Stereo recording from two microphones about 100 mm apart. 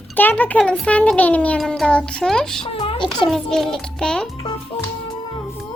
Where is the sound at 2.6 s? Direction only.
65° left (ahead or behind).